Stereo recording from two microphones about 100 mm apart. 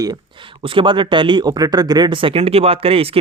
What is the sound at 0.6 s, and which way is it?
Speech, 60° right (ahead or behind).